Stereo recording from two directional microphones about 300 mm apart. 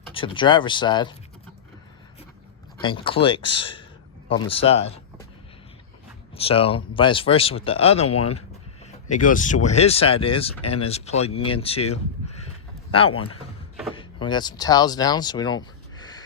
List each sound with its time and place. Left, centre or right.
0.1 s speech: centre
2.8 s speech: centre
6.3 s speech: centre
12.5 s a sound: centre
13.9 s speech: centre